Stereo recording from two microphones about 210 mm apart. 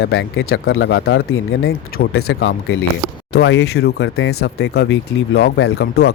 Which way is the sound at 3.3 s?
55° left (ahead or behind).